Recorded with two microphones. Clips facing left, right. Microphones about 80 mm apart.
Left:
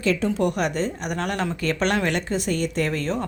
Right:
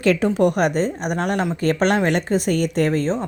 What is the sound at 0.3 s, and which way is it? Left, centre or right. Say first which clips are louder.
Speech: right 5 dB; right.